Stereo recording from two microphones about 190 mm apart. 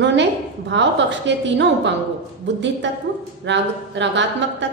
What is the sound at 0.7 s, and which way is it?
A woman's voice, 70° right (ahead or behind).